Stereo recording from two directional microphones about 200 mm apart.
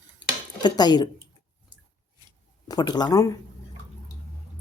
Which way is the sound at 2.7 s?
20° left (ahead or behind).